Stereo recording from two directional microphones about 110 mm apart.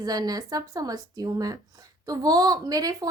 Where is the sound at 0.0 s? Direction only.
35° right (ahead or behind).